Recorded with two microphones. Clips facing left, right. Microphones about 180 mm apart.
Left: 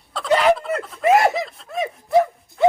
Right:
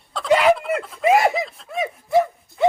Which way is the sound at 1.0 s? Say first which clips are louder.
Left 1 dB; 5° right (ahead or behind).